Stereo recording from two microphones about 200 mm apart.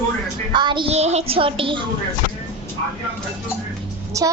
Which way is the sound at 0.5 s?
25° right (ahead or behind).